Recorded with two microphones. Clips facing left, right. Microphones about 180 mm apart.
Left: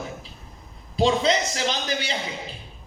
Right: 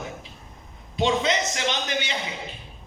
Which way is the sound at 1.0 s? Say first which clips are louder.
Left 2 dB; 35° left (ahead or behind).